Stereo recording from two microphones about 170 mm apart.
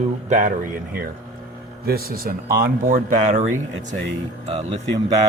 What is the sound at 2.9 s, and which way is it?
Speech, 50° right (ahead or behind).